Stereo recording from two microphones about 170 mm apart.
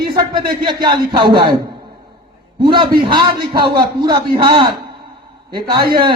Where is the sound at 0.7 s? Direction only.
25° right (ahead or behind).